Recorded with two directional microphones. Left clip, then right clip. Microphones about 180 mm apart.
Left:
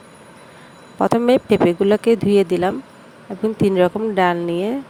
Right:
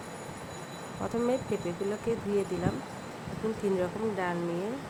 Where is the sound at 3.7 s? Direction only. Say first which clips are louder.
Left 15 dB; 60° left (ahead or behind).